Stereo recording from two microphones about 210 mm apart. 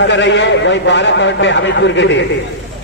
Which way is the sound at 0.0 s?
60° left (ahead or behind).